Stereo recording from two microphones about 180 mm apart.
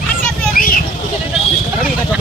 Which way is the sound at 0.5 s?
50° left (ahead or behind).